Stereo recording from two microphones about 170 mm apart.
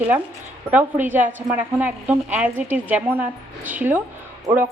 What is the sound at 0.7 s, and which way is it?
A woman's voice, 10° right (ahead or behind).